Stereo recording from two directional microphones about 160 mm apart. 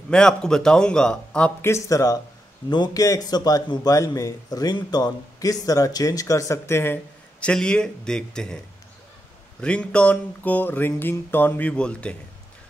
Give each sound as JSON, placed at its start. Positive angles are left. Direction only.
{"t": 0.1, "sound": "a man's voice", "side_deg": 5}
{"t": 1.7, "sound": "a man's voice", "side_deg": 20}
{"t": 9.6, "sound": "a sound", "side_deg": 5}